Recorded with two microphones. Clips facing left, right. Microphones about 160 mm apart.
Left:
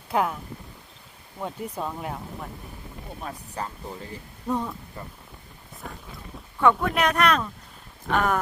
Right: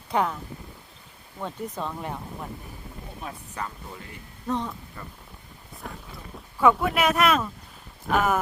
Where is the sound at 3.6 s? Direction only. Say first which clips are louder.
Left 1 dB; 35° left (ahead or behind).